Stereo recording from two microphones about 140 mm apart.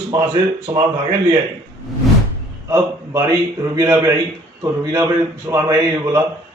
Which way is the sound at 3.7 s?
25° right (ahead or behind).